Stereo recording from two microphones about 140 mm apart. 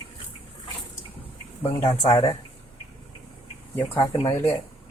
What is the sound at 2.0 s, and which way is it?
Speech, 25° left (ahead or behind).